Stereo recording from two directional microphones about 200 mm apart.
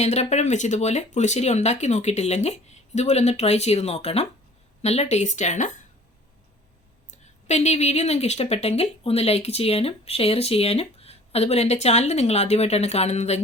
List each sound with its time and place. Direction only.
0.0 s speech: 35° left (ahead or behind)
7.1 s speech: 35° left (ahead or behind)